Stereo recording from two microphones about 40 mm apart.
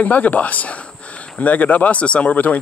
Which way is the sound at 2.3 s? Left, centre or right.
Left.